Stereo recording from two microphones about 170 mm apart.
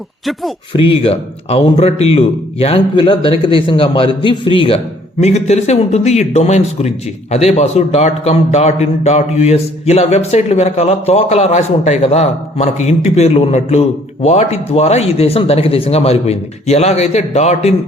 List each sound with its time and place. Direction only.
0.7 s speech: 30° left (ahead or behind)